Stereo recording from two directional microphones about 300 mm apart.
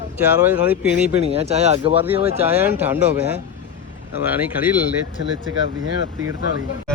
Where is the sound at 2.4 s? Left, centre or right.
Centre.